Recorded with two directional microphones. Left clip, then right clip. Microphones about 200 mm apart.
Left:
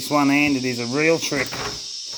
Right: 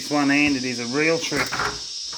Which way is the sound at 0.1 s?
40° left (ahead or behind).